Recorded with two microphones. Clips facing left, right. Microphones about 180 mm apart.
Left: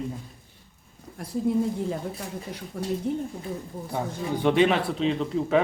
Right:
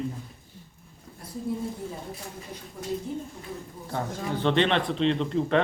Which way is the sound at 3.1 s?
65° left (ahead or behind).